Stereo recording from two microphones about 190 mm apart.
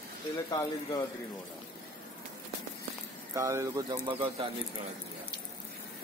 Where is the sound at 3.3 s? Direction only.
15° right (ahead or behind).